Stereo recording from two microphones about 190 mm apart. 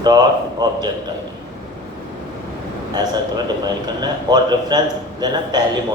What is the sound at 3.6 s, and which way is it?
A man's voice, 20° right (ahead or behind).